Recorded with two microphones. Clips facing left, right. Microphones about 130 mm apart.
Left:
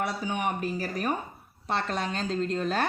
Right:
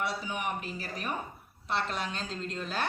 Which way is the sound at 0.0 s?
50° left (ahead or behind).